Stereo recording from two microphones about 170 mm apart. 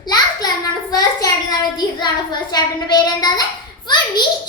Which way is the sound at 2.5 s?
25° left (ahead or behind).